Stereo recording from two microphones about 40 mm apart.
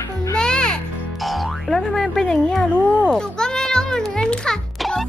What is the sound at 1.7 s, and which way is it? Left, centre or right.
Speech, centre.